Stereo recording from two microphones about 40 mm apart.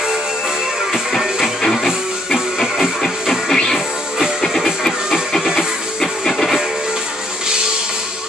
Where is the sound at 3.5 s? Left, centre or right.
Centre.